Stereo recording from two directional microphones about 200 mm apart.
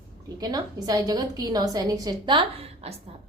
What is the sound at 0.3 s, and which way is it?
A woman's voice, 20° right (ahead or behind).